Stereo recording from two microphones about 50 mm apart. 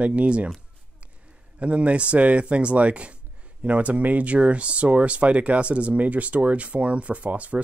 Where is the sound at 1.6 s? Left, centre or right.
Right.